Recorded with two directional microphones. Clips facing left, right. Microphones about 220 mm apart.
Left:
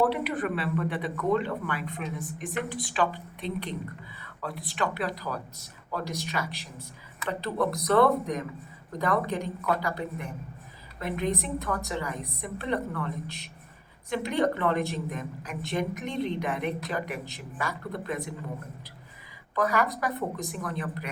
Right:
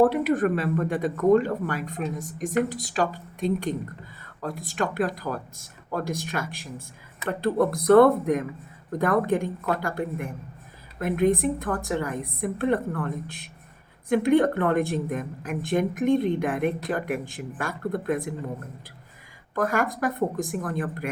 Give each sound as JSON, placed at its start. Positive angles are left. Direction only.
{"t": 0.0, "sound": "a woman's voice", "side_deg": -45}
{"t": 19.5, "sound": "a woman's voice", "side_deg": -50}